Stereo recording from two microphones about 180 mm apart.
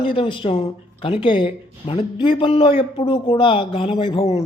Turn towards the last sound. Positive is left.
turn(degrees=30)  # may be behind; listen again after turning